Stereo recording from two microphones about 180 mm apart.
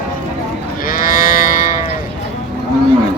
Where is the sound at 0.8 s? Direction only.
50° left (ahead or behind).